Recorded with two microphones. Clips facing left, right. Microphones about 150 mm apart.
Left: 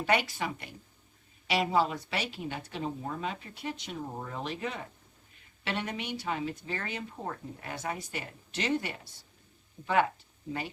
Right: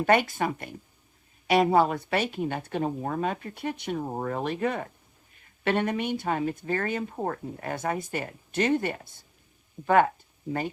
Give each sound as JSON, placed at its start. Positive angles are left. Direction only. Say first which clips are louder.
{"t": 0.0, "sound": "speech", "louder": "right 6 dB", "side_deg": -50}